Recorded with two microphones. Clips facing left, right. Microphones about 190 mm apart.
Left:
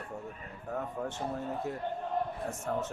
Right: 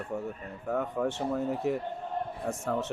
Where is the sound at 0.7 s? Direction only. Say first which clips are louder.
Right 6 dB; 90° right.